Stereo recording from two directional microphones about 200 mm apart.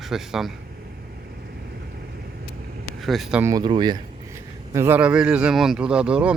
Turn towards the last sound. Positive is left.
turn(degrees=-5)  # may be behind; listen again after turning